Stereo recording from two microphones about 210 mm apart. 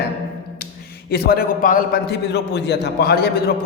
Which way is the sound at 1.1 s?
45° left (ahead or behind).